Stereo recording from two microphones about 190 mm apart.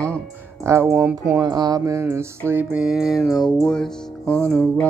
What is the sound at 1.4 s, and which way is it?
Speech, 20° right (ahead or behind).